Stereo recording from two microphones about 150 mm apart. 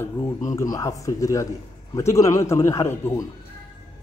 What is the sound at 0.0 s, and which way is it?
Speech, 20° left (ahead or behind).